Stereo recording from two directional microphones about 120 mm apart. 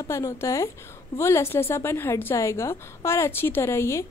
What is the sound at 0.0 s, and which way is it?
A woman's voice, 25° left (ahead or behind).